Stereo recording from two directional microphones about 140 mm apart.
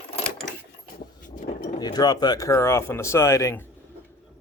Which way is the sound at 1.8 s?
30° left (ahead or behind).